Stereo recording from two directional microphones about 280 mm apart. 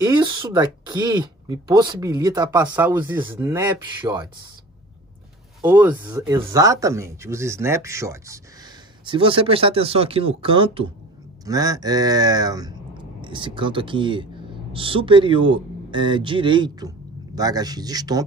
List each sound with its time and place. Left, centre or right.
0.0 s speech: centre
5.6 s speech: centre